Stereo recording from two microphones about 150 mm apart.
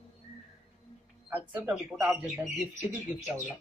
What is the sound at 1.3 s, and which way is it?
Speech, 10° right (ahead or behind).